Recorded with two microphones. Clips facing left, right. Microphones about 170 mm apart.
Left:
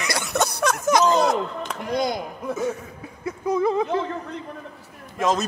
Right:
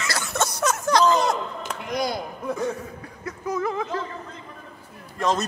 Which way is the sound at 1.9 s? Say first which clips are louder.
Left 2 dB; 20° left (ahead or behind).